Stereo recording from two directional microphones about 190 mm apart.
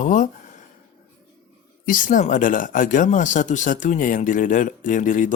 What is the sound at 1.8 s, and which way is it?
Speech, 45° left (ahead or behind).